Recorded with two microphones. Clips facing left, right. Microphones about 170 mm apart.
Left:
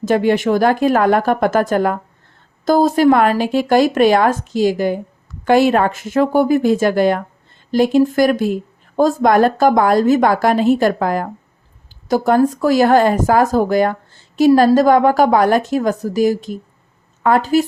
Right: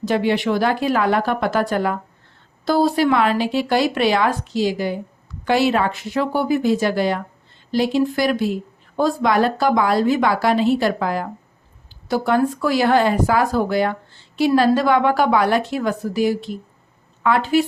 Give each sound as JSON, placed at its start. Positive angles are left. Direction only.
{"t": 0.0, "sound": "speech", "side_deg": 45}